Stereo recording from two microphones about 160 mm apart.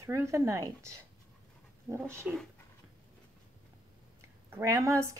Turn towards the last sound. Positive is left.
turn(degrees=-20)  # may be behind; listen again after turning